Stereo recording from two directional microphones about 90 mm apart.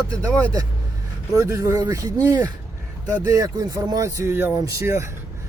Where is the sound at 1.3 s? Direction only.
35° right (ahead or behind).